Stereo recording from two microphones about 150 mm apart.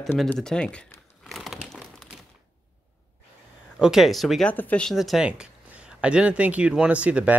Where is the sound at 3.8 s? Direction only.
Centre (ahead or behind).